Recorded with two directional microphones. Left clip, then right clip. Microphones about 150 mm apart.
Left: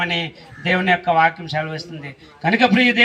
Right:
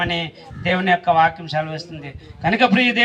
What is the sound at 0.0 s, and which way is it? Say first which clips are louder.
A man's voice: left 1 dB; 20° right (ahead or behind).